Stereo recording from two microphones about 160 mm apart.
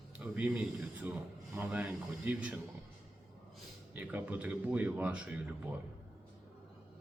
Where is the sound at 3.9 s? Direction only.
10° right (ahead or behind).